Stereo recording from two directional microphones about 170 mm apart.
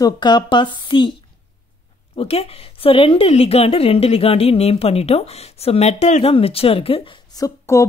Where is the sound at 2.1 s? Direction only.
35° left (ahead or behind).